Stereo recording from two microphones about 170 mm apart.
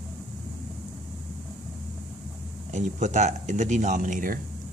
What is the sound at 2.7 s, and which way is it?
Speech, 45° right (ahead or behind).